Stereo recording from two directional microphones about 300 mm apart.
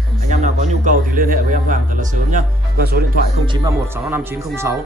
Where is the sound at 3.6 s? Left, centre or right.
Centre.